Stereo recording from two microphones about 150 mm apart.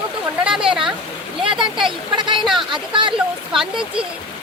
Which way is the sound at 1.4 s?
35° right (ahead or behind).